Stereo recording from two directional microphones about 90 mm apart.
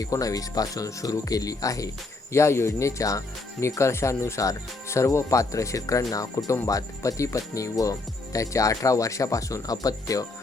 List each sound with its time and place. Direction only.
0.0 s speech: 40° left (ahead or behind)